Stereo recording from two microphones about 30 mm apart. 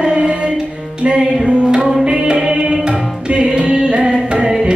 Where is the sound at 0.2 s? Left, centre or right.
Right.